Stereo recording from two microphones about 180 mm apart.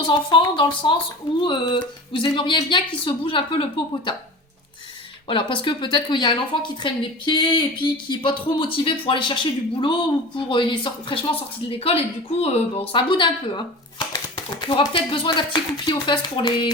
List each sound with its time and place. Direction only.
0.1 s a woman's voice: 25° left (ahead or behind)
5.3 s a woman's voice: 30° left (ahead or behind)